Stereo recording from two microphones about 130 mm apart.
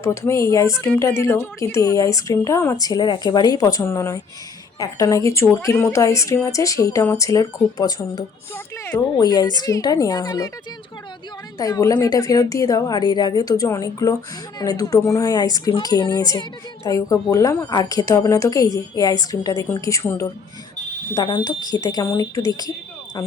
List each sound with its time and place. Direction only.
0.0 s speech: 20° left (ahead or behind)
8.5 s speech: 20° left (ahead or behind)
9.1 s a woman's voice: 30° left (ahead or behind)
11.5 s a woman's voice: 30° left (ahead or behind)